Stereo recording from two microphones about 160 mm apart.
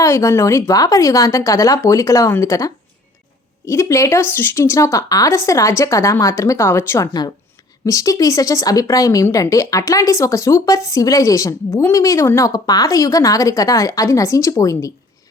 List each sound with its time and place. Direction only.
0.0 s speech: 20° left (ahead or behind)